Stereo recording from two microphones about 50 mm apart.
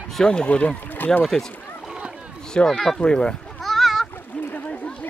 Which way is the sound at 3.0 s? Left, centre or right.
Centre.